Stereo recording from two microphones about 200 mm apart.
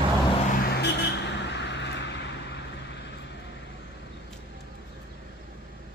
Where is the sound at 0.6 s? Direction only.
55° left (ahead or behind).